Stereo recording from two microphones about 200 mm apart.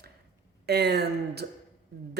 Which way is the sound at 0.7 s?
55° right (ahead or behind).